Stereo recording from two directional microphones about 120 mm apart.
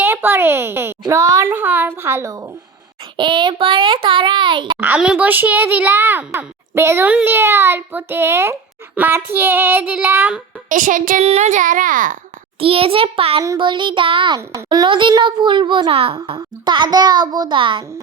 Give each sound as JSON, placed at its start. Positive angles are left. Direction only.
{"t": 0.0, "sound": "a child's voice", "side_deg": -20}
{"t": 1.5, "sound": "a child's voice", "side_deg": -15}
{"t": 3.2, "sound": "a child's voice", "side_deg": -40}
{"t": 4.8, "sound": "a child's voice", "side_deg": -10}
{"t": 10.7, "sound": "a child's voice", "side_deg": -90}
{"t": 12.5, "sound": "a child's voice", "side_deg": -50}
{"t": 14.3, "sound": "a child's voice", "side_deg": -35}